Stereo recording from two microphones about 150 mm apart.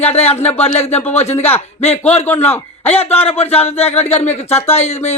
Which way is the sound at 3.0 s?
45° left (ahead or behind).